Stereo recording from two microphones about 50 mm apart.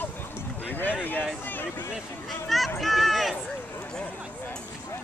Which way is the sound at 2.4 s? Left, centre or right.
Centre.